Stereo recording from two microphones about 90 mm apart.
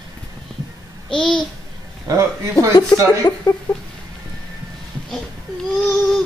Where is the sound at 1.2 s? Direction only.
5° left (ahead or behind).